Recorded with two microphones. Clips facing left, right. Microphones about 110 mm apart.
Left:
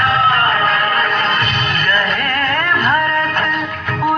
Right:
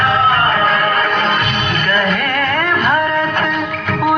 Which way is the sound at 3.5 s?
65° right (ahead or behind).